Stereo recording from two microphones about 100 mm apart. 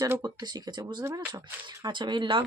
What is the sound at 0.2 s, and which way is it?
Speech, 45° right (ahead or behind).